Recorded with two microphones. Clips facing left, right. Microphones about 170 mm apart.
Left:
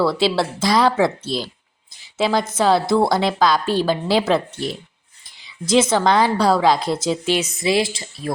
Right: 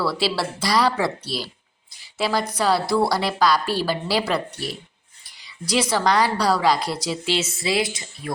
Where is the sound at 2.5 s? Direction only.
25° left (ahead or behind).